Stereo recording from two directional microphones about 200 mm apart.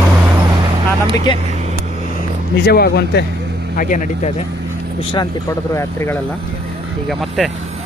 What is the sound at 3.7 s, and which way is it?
Speech, 40° left (ahead or behind).